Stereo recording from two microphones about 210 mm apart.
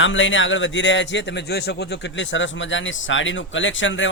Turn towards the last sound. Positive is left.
turn(degrees=65)  # may be behind; listen again after turning